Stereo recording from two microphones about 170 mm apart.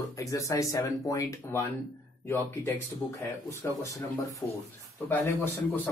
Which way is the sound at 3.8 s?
20° left (ahead or behind).